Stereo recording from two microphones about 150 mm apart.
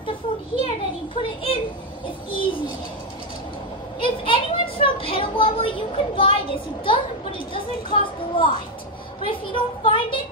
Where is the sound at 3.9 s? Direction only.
35° left (ahead or behind).